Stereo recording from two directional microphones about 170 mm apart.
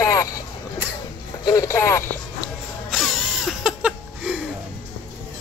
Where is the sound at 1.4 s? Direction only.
20° left (ahead or behind).